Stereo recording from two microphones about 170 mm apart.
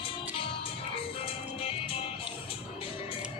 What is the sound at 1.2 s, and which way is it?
Music, 35° left (ahead or behind).